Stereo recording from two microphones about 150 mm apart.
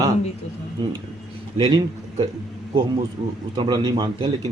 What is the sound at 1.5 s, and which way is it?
Speech, 35° right (ahead or behind).